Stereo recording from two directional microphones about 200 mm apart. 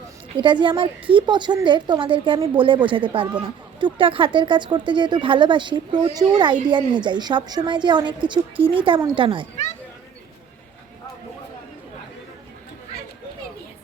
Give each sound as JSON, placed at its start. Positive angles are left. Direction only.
{"t": 0.3, "sound": "speech", "side_deg": -25}